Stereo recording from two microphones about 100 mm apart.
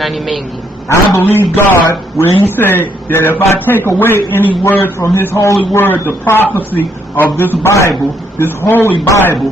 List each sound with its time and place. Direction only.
0.0 s a man's voice: centre (ahead or behind)
0.8 s a man's voice: 25° left (ahead or behind)
9.0 s speech: 30° left (ahead or behind)